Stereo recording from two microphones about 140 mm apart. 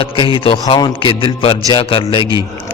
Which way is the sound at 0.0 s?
40° left (ahead or behind).